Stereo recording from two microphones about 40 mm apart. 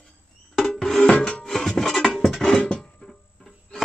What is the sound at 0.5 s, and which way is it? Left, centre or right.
Music, centre.